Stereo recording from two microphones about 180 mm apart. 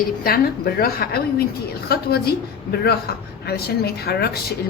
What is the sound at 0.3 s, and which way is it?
Speech, 55° left (ahead or behind).